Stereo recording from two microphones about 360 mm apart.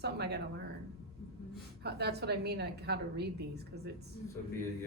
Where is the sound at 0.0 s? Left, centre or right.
Right.